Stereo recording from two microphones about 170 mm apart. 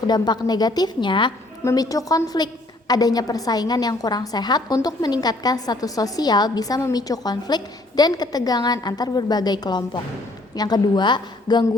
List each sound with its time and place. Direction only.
0.1 s a woman's voice: 25° left (ahead or behind)